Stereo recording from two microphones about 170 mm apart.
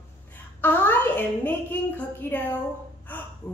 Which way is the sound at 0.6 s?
10° left (ahead or behind).